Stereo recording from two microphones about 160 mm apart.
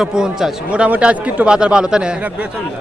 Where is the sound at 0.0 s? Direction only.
5° right (ahead or behind).